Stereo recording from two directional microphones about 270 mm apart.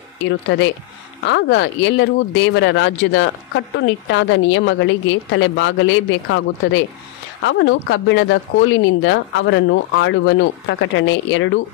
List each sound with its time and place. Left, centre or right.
0.2 s speech: left